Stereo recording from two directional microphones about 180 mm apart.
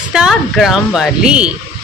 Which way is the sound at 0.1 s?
Centre (ahead or behind).